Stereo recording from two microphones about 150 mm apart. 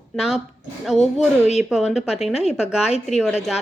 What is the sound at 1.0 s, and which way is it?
Speech, 45° left (ahead or behind).